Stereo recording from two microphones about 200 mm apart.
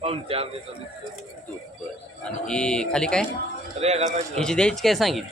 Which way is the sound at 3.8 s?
30° right (ahead or behind).